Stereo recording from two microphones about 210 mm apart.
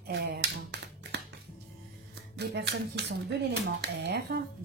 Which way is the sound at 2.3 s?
55° right (ahead or behind).